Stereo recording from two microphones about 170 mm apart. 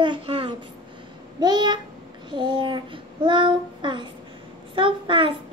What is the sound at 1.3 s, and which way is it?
A child's voice, 25° right (ahead or behind).